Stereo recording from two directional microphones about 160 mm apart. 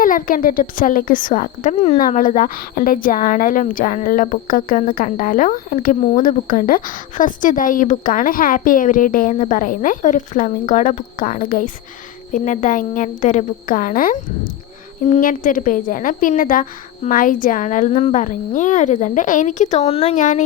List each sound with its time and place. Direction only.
0.0 s a woman's voice: 60° left (ahead or behind); by 20.1 s 40° left (ahead or behind)
20.1 s a woman's voice: 50° left (ahead or behind)